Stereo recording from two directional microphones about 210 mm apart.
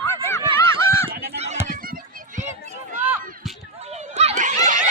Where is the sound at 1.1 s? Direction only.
45° right (ahead or behind).